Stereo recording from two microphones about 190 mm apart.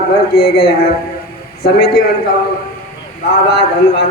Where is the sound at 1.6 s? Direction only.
55° left (ahead or behind).